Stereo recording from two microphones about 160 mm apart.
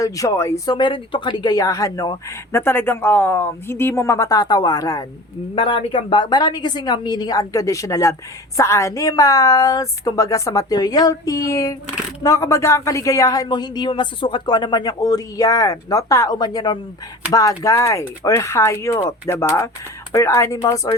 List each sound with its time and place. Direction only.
0.0 s speech: 20° left (ahead or behind)
5.5 s speech: 35° left (ahead or behind)